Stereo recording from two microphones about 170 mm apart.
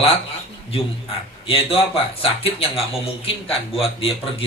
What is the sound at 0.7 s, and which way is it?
A man's voice, 35° left (ahead or behind).